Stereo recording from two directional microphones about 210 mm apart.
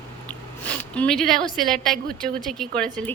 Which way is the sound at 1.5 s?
Centre (ahead or behind).